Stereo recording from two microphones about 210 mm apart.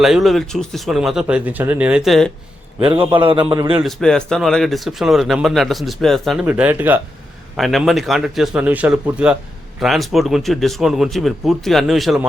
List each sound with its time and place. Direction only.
0.0 s speech: centre (ahead or behind)
2.8 s a man's voice: 25° right (ahead or behind)
3.8 s speech: 5° left (ahead or behind)